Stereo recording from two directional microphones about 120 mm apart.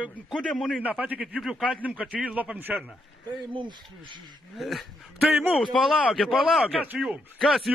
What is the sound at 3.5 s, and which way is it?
Speech, 40° right (ahead or behind).